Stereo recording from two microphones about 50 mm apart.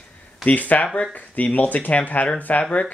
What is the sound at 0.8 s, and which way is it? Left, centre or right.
Speech, centre.